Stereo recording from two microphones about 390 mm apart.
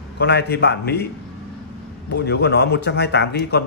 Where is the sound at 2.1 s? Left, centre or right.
Left.